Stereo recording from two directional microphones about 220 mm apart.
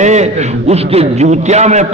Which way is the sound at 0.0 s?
30° right (ahead or behind).